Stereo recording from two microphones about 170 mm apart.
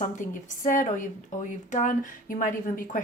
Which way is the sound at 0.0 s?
50° left (ahead or behind).